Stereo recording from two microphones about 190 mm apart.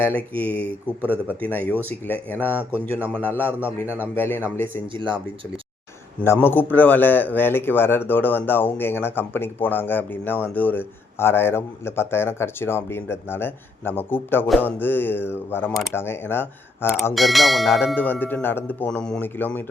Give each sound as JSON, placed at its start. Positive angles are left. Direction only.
{"t": 0.3, "sound": "a man's voice", "side_deg": 5}
{"t": 0.6, "sound": "speech", "side_deg": -10}
{"t": 1.9, "sound": "a man's voice", "side_deg": 10}
{"t": 3.8, "sound": "speech", "side_deg": -10}
{"t": 4.1, "sound": "a man's voice", "side_deg": 10}
{"t": 4.9, "sound": "speech", "side_deg": -25}
{"t": 6.1, "sound": "a man's voice", "side_deg": 10}
{"t": 17.2, "sound": "a man's voice", "side_deg": 0}